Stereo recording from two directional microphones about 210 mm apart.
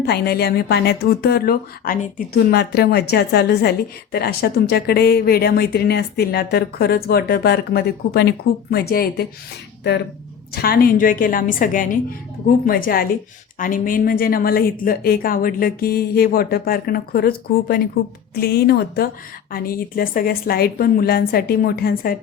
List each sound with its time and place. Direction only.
0.0 s a woman's voice: 50° left (ahead or behind)
10.5 s a woman's voice: 45° left (ahead or behind)